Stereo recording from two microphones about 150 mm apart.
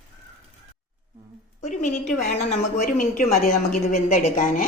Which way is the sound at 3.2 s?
65° left (ahead or behind).